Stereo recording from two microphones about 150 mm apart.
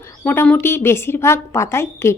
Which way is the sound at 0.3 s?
10° left (ahead or behind).